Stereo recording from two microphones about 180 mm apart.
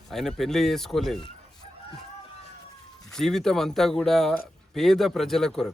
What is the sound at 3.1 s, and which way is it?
Speech, centre (ahead or behind).